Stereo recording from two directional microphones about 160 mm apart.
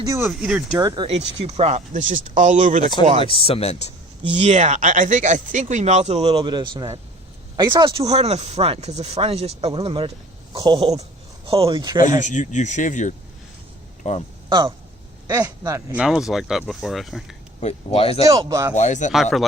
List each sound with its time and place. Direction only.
0.0 s speech: 15° right (ahead or behind)
0.3 s speech: 5° right (ahead or behind)
0.8 s speech: 20° right (ahead or behind)
1.0 s speech: 40° right (ahead or behind)
3.2 s speech: 35° left (ahead or behind)
4.4 s speech: 45° right (ahead or behind)
12.2 s speech: 50° left (ahead or behind)
15.3 s speech: 20° right (ahead or behind); by 17.3 s centre (ahead or behind)
17.6 s speech: 40° left (ahead or behind)
18.3 s speech: 20° right (ahead or behind)
18.7 s speech: 50° left (ahead or behind)
19.1 s speech: centre (ahead or behind)